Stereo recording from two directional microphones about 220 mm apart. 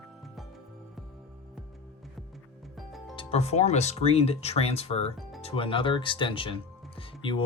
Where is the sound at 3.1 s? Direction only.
25° left (ahead or behind).